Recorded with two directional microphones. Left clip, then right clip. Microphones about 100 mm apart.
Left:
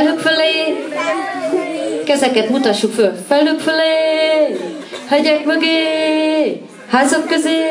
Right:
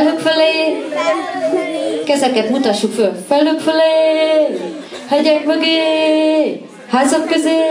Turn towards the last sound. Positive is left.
turn(degrees=20)  # may be behind; listen again after turning